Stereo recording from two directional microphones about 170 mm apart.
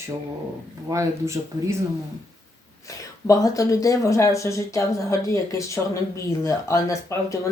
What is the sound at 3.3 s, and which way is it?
Speech, 20° left (ahead or behind).